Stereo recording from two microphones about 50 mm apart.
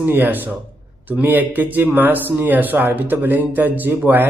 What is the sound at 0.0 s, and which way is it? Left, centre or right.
Speech, right.